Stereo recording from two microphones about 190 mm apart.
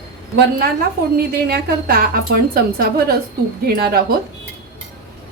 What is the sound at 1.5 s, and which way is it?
A woman's voice, 55° right (ahead or behind).